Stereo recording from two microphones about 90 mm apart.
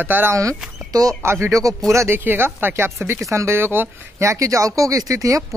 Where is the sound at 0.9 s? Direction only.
40° right (ahead or behind).